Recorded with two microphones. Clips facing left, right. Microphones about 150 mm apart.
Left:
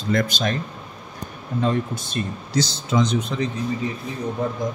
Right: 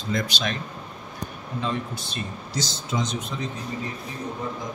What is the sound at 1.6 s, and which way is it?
Speech, 45° left (ahead or behind).